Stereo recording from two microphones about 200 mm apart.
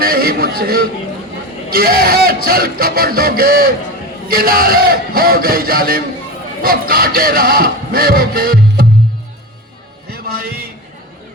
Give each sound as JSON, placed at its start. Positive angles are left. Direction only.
{"t": 0.0, "sound": "a man's voice", "side_deg": -50}
{"t": 10.1, "sound": "music", "side_deg": -50}